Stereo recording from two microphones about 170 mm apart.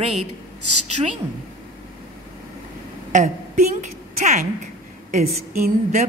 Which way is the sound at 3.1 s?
50° right (ahead or behind).